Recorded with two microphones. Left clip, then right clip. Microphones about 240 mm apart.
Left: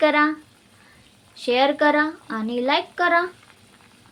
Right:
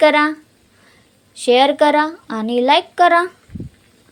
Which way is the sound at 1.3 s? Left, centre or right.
Right.